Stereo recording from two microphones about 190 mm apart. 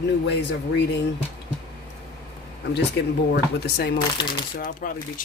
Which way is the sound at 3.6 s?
55° left (ahead or behind).